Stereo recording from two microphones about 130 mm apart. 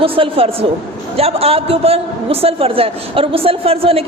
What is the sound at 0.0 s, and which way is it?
A man's voice, 45° right (ahead or behind).